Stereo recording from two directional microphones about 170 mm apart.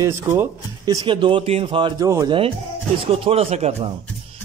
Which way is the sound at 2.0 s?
20° right (ahead or behind).